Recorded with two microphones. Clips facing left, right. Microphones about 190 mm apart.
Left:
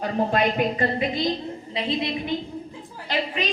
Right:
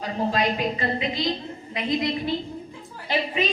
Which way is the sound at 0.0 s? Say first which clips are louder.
Left 2 dB; 55° left (ahead or behind).